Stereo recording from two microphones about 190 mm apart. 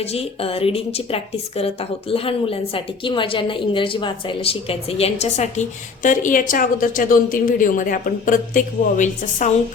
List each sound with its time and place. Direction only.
0.0 s a woman's voice: 30° left (ahead or behind)